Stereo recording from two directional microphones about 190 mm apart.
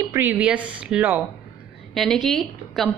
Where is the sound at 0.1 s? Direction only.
10° right (ahead or behind).